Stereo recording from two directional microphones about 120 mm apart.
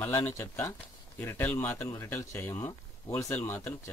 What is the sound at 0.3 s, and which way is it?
Speech, 25° left (ahead or behind).